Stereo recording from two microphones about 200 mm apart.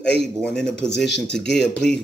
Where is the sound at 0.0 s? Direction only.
55° left (ahead or behind).